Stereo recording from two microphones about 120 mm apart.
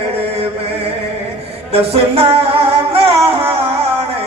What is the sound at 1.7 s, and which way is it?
Music, 55° right (ahead or behind).